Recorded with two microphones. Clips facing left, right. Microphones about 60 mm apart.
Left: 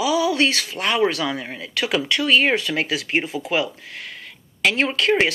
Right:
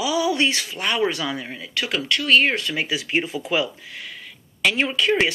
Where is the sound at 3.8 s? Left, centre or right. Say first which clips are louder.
Left 1 dB; left.